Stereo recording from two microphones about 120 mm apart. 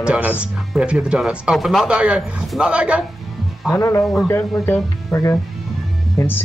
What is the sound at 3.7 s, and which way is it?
Speech, 25° left (ahead or behind).